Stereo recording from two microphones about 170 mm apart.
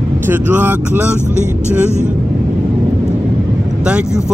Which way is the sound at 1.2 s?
45° right (ahead or behind).